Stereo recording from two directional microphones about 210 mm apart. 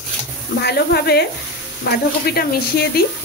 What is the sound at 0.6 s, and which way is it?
Speech, 50° left (ahead or behind).